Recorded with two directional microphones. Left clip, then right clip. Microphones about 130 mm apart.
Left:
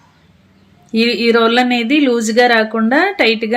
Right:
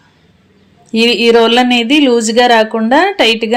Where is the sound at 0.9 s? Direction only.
20° right (ahead or behind).